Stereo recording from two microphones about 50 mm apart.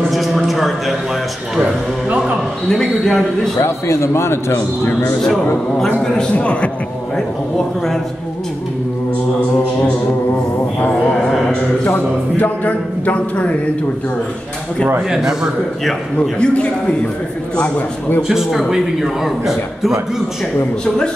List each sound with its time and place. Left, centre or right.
0.1 s a sound: centre
1.6 s a man's voice: right
2.7 s speech: centre
3.5 s a man's voice: left
5.9 s a man's voice: centre
7.2 s speech: centre
11.1 s music: centre
12.4 s a man's voice: left
15.0 s a man's voice: centre
16.2 s a man's voice: left
18.3 s speech: centre